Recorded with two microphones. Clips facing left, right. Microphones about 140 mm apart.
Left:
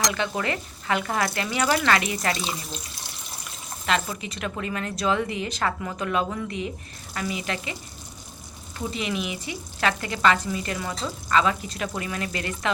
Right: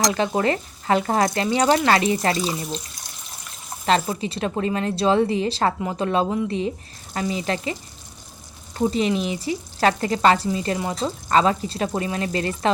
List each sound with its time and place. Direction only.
0.0 s a woman's voice: 35° right (ahead or behind)
3.8 s a woman's voice: 35° right (ahead or behind)
8.8 s a woman's voice: 35° right (ahead or behind)